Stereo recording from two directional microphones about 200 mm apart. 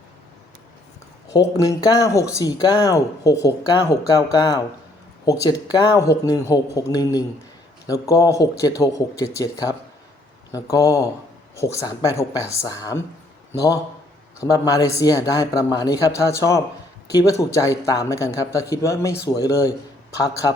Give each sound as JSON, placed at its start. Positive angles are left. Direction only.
{"t": 1.3, "sound": "a man's voice", "side_deg": 15}